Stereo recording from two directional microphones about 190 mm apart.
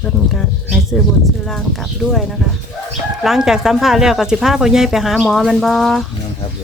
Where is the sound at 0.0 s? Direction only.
Centre (ahead or behind).